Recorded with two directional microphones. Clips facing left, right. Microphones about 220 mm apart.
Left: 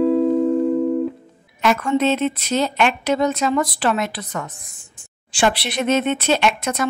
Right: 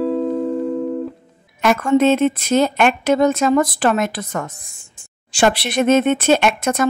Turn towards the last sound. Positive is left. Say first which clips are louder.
# right 3 dB
turn(degrees=-50)  # may be behind; listen again after turning